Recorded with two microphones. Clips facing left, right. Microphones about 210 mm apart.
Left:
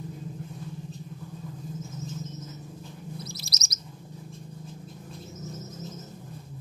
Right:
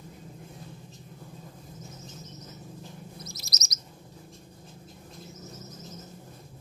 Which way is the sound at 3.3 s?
30° left (ahead or behind).